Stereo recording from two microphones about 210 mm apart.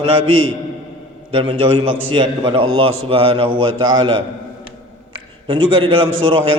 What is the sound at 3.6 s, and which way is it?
Speech, 75° right (ahead or behind).